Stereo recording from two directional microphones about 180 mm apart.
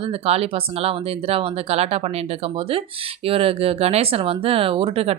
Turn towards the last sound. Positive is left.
turn(degrees=-30)  # may be behind; listen again after turning